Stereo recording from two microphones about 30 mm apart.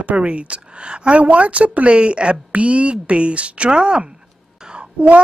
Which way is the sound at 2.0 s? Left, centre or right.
Right.